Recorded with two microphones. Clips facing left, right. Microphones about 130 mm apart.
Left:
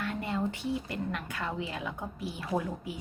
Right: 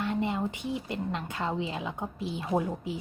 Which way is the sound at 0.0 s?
20° right (ahead or behind).